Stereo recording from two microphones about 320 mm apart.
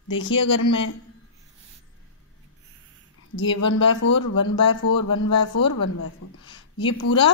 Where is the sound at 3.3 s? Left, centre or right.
Left.